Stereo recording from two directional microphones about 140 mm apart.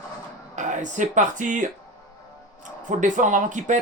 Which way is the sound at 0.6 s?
60° right (ahead or behind).